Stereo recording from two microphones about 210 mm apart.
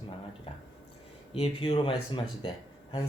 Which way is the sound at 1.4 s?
25° left (ahead or behind).